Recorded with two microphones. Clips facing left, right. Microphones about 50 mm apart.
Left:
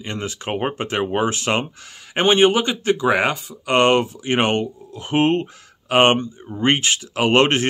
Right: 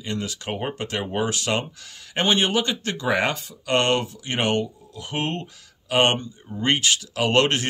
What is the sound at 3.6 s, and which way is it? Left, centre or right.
Speech, centre.